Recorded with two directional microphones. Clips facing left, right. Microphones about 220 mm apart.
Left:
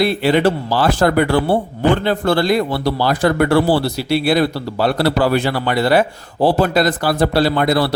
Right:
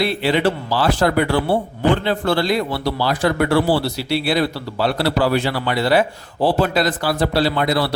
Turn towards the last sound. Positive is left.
turn(degrees=50)  # may be behind; listen again after turning